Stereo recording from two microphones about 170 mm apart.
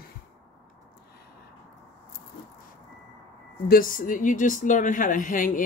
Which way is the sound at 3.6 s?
60° left (ahead or behind).